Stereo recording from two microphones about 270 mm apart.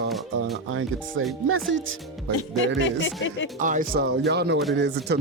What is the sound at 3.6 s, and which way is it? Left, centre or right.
Speech, right.